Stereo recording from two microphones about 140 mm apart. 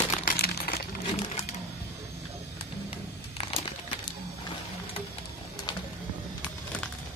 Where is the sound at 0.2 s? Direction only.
90° left.